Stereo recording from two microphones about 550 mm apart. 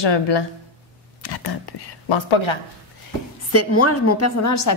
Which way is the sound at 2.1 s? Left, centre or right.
Left.